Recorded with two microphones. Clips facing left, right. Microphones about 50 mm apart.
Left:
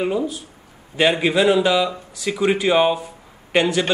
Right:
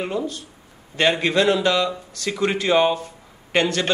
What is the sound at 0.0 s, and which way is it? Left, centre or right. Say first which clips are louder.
A man's voice: left 4 dB; centre.